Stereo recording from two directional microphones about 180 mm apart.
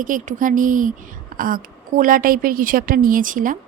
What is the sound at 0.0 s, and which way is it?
A woman's voice, 45° right (ahead or behind).